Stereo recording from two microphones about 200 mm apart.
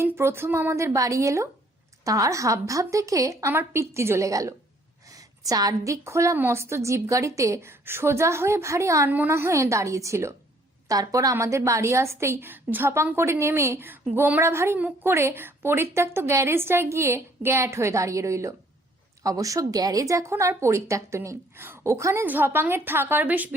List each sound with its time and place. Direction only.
0.0 s a woman's voice: 10° right (ahead or behind)